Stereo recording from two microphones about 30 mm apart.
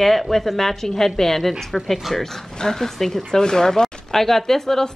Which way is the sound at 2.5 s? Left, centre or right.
Centre.